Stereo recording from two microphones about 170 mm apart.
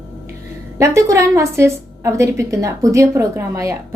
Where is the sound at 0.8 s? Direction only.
15° right (ahead or behind).